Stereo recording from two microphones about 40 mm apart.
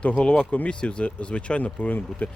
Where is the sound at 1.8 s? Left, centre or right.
Left.